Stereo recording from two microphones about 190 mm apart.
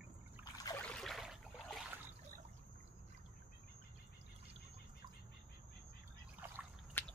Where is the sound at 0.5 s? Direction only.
20° left (ahead or behind).